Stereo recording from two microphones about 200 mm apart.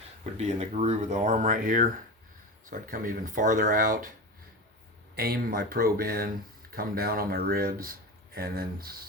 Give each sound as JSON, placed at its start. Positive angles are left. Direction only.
{"t": 0.3, "sound": "speech", "side_deg": -35}
{"t": 5.1, "sound": "speech", "side_deg": -50}